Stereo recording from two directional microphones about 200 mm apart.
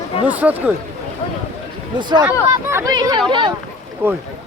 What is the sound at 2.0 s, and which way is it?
Speech, 20° right (ahead or behind).